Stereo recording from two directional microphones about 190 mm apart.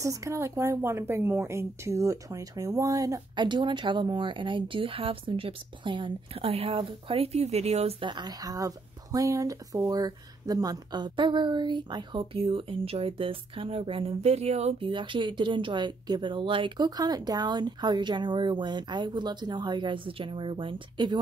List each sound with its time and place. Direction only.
0.0 s a woman's voice: 15° right (ahead or behind)